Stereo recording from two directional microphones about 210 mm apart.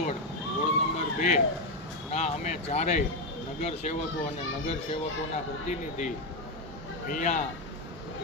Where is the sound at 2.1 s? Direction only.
35° left (ahead or behind).